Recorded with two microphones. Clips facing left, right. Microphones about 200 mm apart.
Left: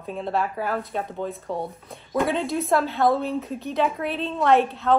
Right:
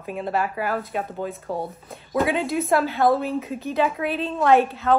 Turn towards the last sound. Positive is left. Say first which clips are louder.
# right 1 dB
turn(degrees=0)  # may be behind; listen again after turning